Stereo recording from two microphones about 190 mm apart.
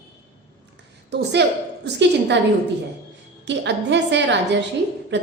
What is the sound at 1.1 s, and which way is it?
A woman's voice, 65° right (ahead or behind).